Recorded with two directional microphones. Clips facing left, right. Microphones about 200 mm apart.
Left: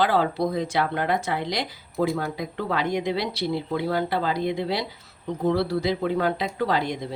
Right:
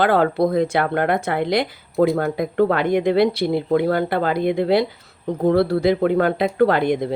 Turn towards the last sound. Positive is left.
turn(degrees=-55)  # may be behind; listen again after turning